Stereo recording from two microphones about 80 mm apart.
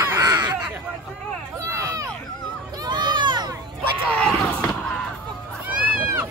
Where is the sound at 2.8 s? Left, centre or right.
Right.